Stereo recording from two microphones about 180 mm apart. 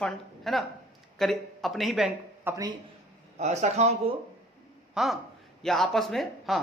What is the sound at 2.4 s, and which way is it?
Speech, 15° right (ahead or behind).